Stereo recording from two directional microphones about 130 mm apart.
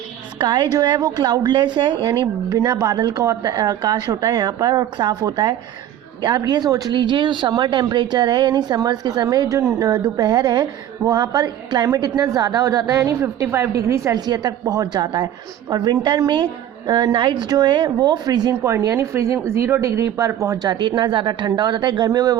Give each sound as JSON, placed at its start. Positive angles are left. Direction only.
{"t": 0.3, "sound": "speech", "side_deg": -35}
{"t": 2.6, "sound": "speech", "side_deg": -25}